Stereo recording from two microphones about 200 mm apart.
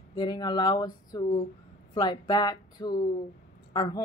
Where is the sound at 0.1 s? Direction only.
20° left (ahead or behind).